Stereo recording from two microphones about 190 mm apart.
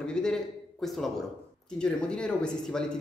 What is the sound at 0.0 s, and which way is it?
A man's voice, 5° left (ahead or behind).